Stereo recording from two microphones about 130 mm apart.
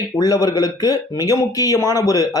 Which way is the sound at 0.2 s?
25° left (ahead or behind).